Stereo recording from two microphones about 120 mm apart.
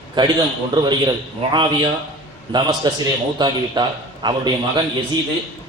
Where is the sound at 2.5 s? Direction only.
40° right (ahead or behind).